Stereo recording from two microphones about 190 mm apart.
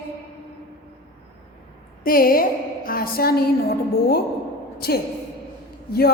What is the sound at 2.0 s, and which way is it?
A woman's voice, 50° left (ahead or behind).